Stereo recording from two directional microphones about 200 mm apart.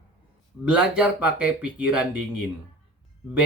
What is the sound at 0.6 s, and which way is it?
Speech, 5° right (ahead or behind).